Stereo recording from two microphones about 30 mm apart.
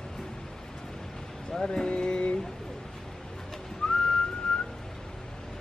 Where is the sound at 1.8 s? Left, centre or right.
Left.